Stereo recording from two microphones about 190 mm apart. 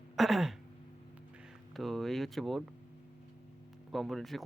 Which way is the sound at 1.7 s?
Centre (ahead or behind).